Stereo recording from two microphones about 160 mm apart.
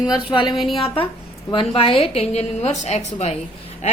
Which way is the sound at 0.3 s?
30° left (ahead or behind).